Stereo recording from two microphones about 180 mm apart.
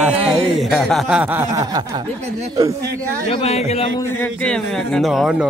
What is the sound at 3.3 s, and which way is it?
Speech, 35° left (ahead or behind).